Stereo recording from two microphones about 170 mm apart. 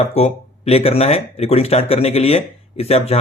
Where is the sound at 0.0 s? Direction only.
40° left (ahead or behind).